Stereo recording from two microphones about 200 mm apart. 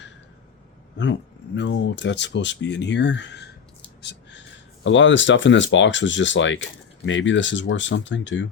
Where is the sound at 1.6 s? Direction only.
65° left (ahead or behind).